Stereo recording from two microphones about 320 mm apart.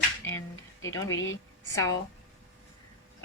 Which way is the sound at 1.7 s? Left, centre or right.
Centre.